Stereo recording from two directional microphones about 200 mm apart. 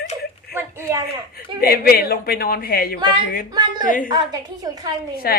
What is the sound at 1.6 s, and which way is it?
A man's voice, 50° left (ahead or behind).